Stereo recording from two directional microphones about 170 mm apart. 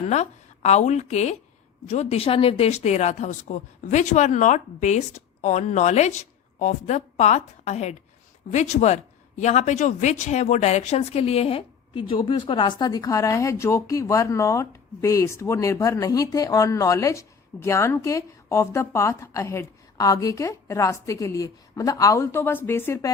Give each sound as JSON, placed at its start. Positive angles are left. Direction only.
{"t": 0.0, "sound": "a woman's voice", "side_deg": 40}